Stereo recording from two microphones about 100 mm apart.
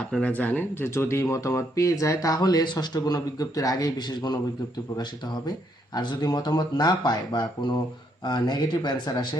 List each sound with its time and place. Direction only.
0.1 s speech: 15° left (ahead or behind); by 9.2 s 45° left (ahead or behind)